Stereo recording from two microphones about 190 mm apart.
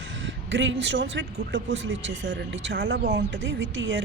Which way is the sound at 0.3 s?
70° right (ahead or behind).